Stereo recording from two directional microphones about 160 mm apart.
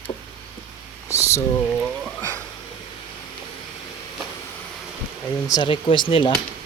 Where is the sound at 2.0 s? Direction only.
10° left (ahead or behind).